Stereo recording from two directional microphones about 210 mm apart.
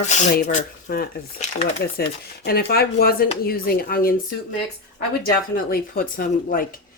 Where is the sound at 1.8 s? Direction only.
50° left (ahead or behind).